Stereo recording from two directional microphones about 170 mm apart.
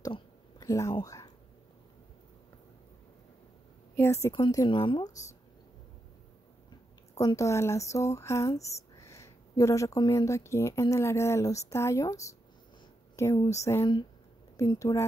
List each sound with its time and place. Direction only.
0.0 s a sound: 20° left (ahead or behind)
1.0 s speech: 20° left (ahead or behind)
3.9 s a woman's voice: 15° left (ahead or behind)
7.2 s speech: 20° left (ahead or behind)